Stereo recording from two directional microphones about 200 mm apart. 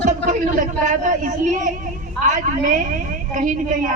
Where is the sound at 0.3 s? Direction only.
40° right (ahead or behind).